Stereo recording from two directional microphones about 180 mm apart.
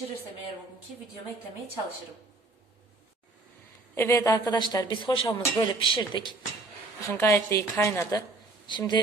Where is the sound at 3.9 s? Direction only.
15° left (ahead or behind).